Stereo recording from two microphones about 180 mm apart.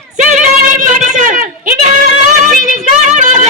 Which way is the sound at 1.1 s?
45° right (ahead or behind).